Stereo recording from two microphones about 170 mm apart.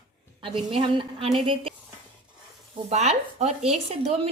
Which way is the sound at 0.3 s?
30° right (ahead or behind).